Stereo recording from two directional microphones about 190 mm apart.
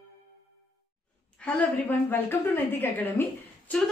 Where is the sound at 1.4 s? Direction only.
5° left (ahead or behind).